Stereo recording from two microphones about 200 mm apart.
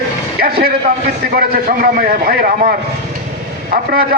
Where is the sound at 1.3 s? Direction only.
45° right (ahead or behind).